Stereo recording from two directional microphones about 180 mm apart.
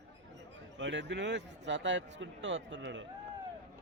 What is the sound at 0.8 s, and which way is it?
A man's voice, 80° right.